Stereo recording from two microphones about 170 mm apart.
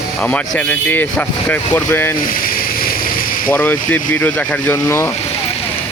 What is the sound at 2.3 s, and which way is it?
Vehicle, 55° left (ahead or behind).